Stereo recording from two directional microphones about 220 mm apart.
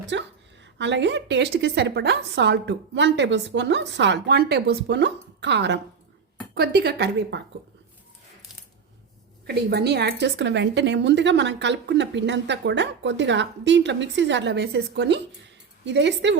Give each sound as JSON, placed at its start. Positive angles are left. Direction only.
{"t": 0.0, "sound": "a woman's voice", "side_deg": -50}
{"t": 9.5, "sound": "a woman's voice", "side_deg": -45}